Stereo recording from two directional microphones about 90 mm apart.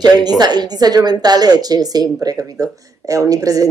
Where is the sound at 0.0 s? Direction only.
50° right (ahead or behind).